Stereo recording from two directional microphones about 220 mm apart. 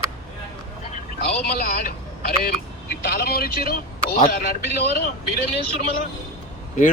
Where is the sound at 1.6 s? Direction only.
40° left (ahead or behind).